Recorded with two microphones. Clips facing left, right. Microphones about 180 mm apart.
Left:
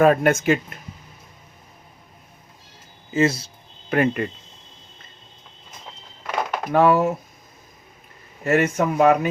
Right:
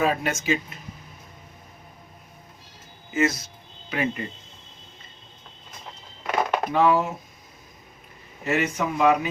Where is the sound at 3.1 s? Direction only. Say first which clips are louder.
Left 4 dB; 30° left (ahead or behind).